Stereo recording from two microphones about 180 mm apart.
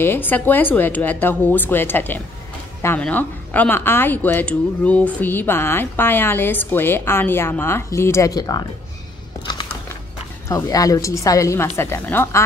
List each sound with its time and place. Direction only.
0.0 s speech: 10° left (ahead or behind)
10.5 s speech: 20° left (ahead or behind)